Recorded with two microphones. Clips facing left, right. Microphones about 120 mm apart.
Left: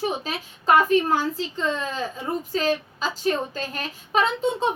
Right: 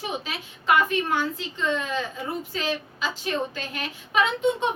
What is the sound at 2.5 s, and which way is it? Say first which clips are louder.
A woman's voice: left 5 dB; 40° left (ahead or behind).